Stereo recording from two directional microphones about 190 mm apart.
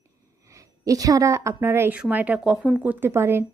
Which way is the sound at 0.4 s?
15° right (ahead or behind).